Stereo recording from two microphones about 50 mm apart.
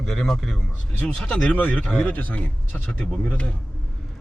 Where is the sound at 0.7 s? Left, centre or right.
Left.